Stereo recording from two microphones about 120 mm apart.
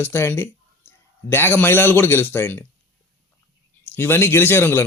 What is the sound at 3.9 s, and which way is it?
Speech, 20° left (ahead or behind).